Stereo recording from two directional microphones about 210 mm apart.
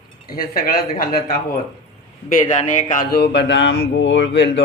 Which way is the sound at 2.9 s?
50° left (ahead or behind).